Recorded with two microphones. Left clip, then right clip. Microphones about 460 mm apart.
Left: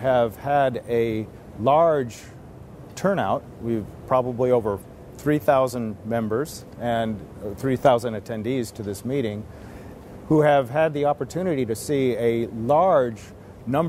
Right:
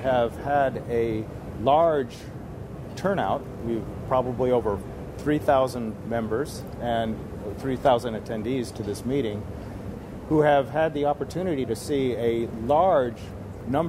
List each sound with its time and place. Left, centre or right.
0.0 s speech: left